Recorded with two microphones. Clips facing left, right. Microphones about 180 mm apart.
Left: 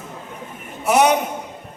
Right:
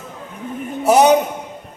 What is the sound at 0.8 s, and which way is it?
Speech, 35° right (ahead or behind).